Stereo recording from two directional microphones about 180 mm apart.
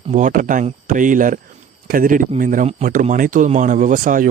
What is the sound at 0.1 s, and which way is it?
A man's voice, 45° right (ahead or behind).